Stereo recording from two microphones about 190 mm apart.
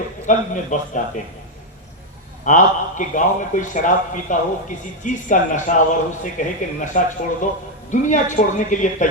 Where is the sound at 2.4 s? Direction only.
40° left (ahead or behind).